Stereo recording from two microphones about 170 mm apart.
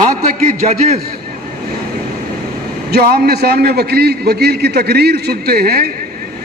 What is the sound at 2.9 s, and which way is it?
A man's voice, 65° right (ahead or behind).